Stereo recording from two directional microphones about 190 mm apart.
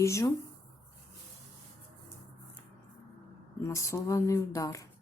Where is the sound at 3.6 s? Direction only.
15° left (ahead or behind).